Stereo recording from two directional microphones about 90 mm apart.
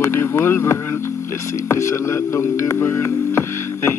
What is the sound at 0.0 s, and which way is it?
Speech, 25° left (ahead or behind).